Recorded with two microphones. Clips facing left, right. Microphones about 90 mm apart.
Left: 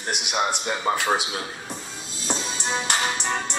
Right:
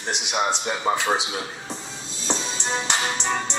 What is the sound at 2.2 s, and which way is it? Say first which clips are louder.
Music: right 1 dB; 10° left (ahead or behind).